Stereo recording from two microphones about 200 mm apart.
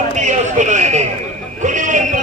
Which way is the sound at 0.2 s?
35° right (ahead or behind).